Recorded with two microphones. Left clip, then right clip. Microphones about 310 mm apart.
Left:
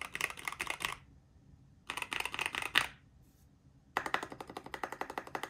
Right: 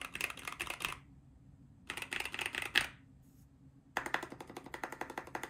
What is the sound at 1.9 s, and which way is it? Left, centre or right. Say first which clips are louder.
Computer keyboard: left 2 dB; centre.